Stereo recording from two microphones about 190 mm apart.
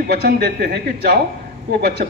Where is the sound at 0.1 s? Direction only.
55° right (ahead or behind).